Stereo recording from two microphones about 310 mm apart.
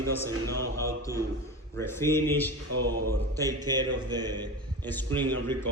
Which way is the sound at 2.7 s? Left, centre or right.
Right.